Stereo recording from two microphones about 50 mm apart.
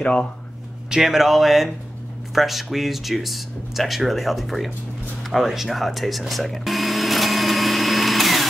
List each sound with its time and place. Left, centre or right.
0.0 s speech: left
1.0 s speech: centre
5.2 s vacuum cleaner: centre